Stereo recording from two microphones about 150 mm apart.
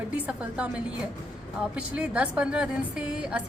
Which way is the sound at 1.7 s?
5° right (ahead or behind).